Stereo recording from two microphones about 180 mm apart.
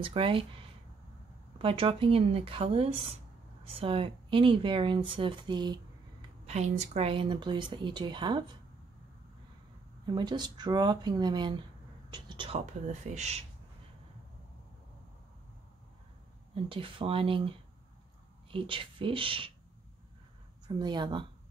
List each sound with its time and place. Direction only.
0.0 s speech: 30° right (ahead or behind)
1.6 s speech: 30° right (ahead or behind)
6.4 s speech: 40° right (ahead or behind)
10.1 s speech: 25° right (ahead or behind); by 13.4 s 40° right (ahead or behind)
16.6 s speech: 30° right (ahead or behind)
20.6 s speech: 25° right (ahead or behind)